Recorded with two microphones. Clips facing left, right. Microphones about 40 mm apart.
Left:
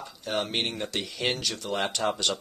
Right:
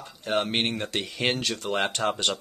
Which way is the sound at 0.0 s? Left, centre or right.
Centre.